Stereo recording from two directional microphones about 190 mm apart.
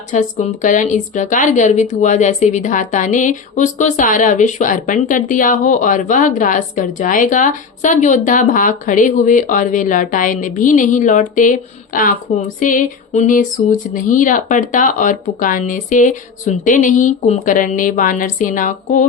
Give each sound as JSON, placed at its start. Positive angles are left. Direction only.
{"t": 0.1, "sound": "speech", "side_deg": 40}